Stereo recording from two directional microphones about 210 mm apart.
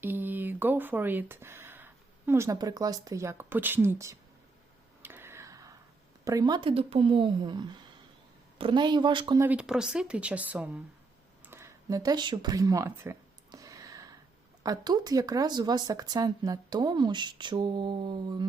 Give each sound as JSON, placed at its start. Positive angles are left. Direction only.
{"t": 0.0, "sound": "speech", "side_deg": -10}
{"t": 5.0, "sound": "a sound", "side_deg": -10}
{"t": 6.2, "sound": "speech", "side_deg": -20}
{"t": 9.5, "sound": "speech", "side_deg": -5}
{"t": 11.4, "sound": "a sound", "side_deg": -10}
{"t": 14.6, "sound": "speech", "side_deg": -15}